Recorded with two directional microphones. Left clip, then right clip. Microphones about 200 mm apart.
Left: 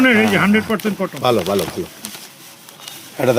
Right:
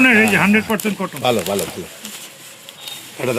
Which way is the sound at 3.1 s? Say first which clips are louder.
Left 5 dB; 60° left (ahead or behind).